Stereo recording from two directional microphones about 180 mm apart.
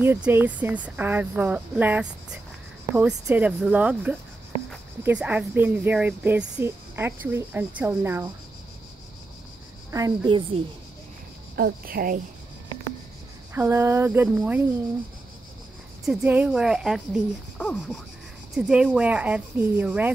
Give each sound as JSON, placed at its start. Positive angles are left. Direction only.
{"t": 0.0, "sound": "a woman's voice", "side_deg": -10}
{"t": 9.8, "sound": "a woman's voice", "side_deg": -20}
{"t": 11.5, "sound": "speech", "side_deg": -55}
{"t": 13.6, "sound": "a woman's voice", "side_deg": -15}
{"t": 16.1, "sound": "speech", "side_deg": -10}
{"t": 18.7, "sound": "a woman's voice", "side_deg": -5}